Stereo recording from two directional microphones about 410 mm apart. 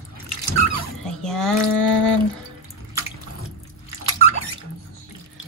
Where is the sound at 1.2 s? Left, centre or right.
Centre.